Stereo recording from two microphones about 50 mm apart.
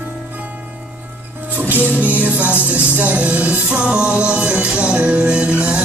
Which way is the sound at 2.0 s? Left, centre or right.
Right.